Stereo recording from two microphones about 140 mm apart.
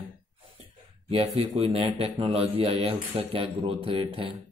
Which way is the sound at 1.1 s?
45° right (ahead or behind).